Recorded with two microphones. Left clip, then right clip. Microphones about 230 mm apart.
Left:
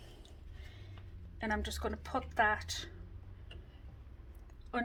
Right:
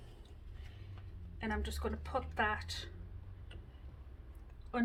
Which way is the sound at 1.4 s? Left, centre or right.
Left.